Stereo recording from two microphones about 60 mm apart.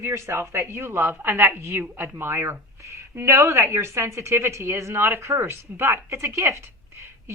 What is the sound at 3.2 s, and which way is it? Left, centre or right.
A woman's voice, right.